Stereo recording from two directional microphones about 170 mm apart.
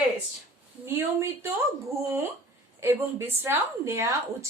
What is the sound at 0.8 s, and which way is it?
Speech, 15° right (ahead or behind).